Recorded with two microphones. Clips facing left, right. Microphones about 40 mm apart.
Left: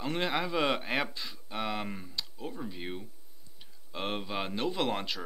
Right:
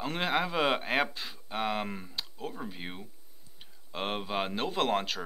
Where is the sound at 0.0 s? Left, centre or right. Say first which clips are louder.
Right 1 dB; centre.